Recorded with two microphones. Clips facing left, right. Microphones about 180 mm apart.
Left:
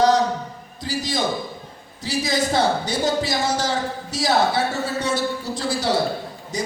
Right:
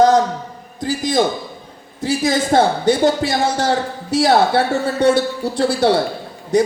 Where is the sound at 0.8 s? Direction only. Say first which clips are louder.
Right 7 dB; 50° right (ahead or behind).